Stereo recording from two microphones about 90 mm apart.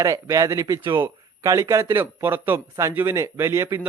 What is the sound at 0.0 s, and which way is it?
A man's voice, 40° right (ahead or behind).